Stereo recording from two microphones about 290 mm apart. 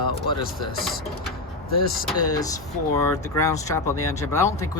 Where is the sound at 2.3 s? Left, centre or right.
Centre.